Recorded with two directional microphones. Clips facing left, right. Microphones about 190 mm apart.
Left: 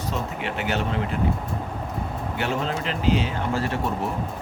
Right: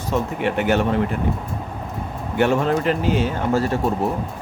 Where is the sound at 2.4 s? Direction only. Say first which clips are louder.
Right 9 dB; 50° right (ahead or behind).